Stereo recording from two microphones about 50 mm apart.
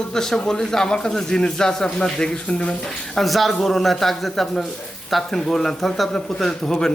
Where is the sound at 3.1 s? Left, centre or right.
Centre.